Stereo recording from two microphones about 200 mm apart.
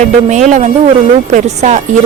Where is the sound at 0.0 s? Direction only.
35° right (ahead or behind).